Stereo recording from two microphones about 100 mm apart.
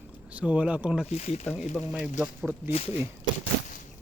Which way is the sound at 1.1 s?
90° left.